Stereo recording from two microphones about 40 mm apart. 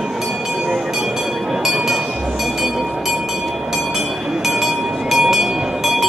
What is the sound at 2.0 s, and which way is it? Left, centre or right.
Train, right.